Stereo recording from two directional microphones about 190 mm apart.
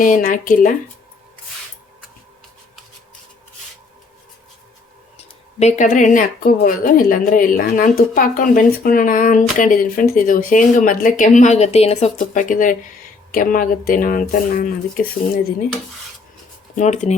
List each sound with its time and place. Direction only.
0.0 s speech: 45° left (ahead or behind)
5.1 s speech: 35° left (ahead or behind)
16.7 s speech: 40° left (ahead or behind)